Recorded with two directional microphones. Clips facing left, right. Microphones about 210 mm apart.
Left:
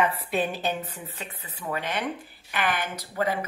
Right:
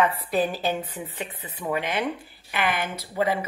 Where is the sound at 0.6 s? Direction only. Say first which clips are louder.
Right 3 dB; 10° right (ahead or behind).